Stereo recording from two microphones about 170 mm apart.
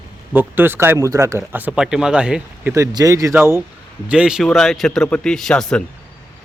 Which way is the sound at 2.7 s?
20° right (ahead or behind).